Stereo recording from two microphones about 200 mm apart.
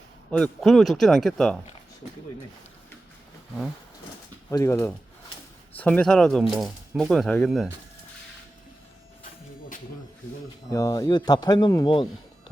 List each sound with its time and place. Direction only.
0.3 s speech: 5° left (ahead or behind)
4.4 s speech: 15° left (ahead or behind)
10.7 s speech: 15° left (ahead or behind)